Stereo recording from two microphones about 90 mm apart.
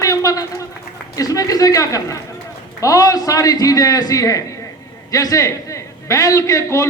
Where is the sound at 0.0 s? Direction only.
40° left (ahead or behind).